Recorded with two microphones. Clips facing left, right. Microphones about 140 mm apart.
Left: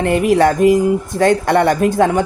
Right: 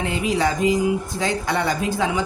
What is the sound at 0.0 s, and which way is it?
Speech, 60° left (ahead or behind).